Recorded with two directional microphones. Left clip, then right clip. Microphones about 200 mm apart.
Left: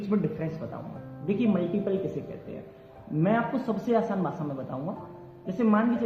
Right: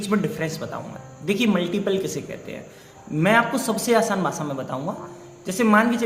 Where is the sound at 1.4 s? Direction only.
25° right (ahead or behind).